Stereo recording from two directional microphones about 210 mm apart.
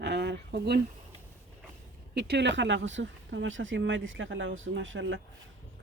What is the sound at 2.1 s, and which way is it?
Speech, 50° right (ahead or behind).